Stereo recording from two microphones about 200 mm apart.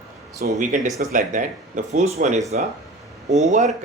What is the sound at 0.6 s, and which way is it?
Speech, 40° right (ahead or behind).